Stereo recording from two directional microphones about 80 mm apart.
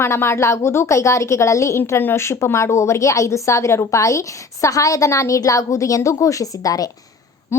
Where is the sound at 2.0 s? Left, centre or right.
Left.